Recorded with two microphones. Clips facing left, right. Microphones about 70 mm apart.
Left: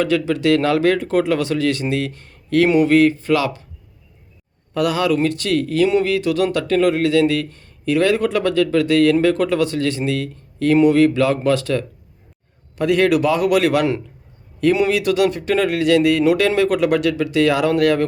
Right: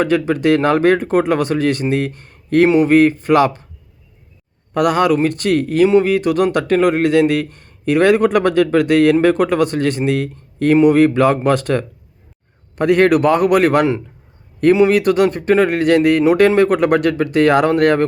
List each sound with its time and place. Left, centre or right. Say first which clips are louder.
0.0 s speech: right 3 dB; right
4.7 s speech: right 4 dB; right
14.8 s speech: right 4 dB; right